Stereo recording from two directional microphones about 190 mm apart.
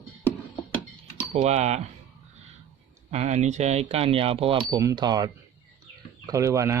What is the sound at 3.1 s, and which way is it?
Speech, 35° right (ahead or behind).